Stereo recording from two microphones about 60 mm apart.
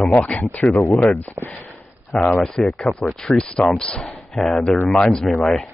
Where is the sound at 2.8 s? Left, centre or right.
Centre.